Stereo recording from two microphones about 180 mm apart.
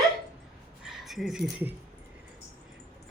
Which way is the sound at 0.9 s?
Centre (ahead or behind).